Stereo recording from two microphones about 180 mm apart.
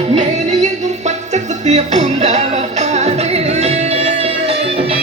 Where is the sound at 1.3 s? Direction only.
40° right (ahead or behind).